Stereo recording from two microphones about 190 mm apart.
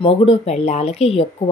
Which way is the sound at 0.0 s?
30° left (ahead or behind).